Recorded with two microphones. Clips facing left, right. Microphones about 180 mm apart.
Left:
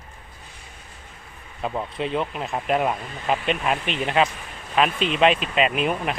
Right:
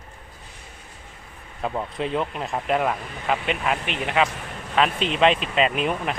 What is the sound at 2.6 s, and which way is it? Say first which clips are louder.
Speech: left 1 dB; 15° left (ahead or behind).